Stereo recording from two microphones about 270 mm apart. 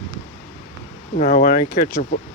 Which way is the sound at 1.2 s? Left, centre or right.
Left.